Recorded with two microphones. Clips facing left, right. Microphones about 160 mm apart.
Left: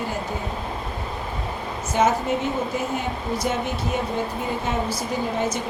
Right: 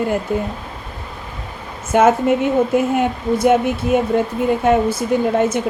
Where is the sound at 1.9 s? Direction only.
55° right (ahead or behind).